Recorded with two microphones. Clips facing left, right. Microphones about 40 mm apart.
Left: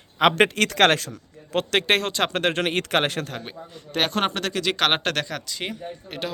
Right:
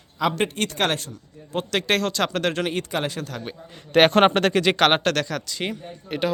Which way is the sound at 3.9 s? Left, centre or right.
Right.